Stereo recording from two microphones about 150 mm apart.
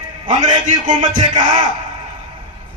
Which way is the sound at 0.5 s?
30° right (ahead or behind).